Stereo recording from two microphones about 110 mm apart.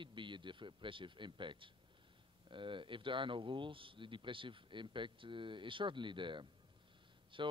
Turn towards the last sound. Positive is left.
turn(degrees=-50)  # may be behind; listen again after turning